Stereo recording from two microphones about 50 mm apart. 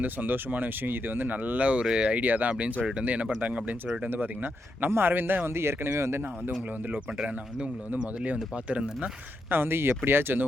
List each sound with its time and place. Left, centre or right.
0.0 s speech: right
1.8 s speech: centre
2.2 s speech: right
4.1 s speech: right
8.7 s speech: right
9.5 s speech: right